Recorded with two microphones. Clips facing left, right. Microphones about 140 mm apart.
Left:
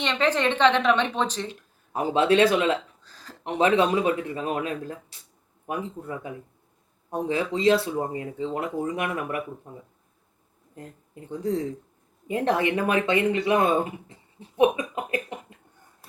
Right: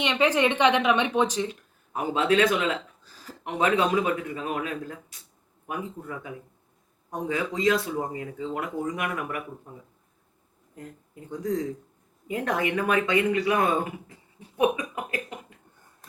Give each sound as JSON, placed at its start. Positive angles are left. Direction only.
{"t": 0.0, "sound": "speech", "side_deg": -10}
{"t": 1.9, "sound": "speech", "side_deg": 30}
{"t": 3.0, "sound": "a sound", "side_deg": -10}
{"t": 3.4, "sound": "speech", "side_deg": 30}
{"t": 10.8, "sound": "speech", "side_deg": 30}
{"t": 14.1, "sound": "a sound", "side_deg": 25}